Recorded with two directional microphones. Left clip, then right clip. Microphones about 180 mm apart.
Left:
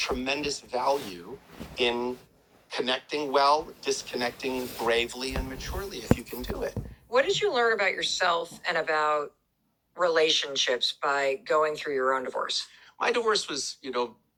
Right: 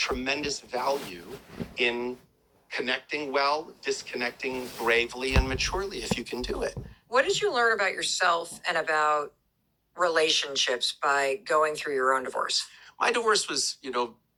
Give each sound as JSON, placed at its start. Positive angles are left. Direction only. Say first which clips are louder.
{"t": 0.0, "sound": "speech", "louder": "even", "side_deg": -10}
{"t": 4.8, "sound": "speech", "louder": "right 2 dB", "side_deg": -10}
{"t": 5.3, "sound": "speech", "louder": "right 8 dB", "side_deg": -50}
{"t": 6.0, "sound": "speech", "louder": "left 2 dB", "side_deg": -20}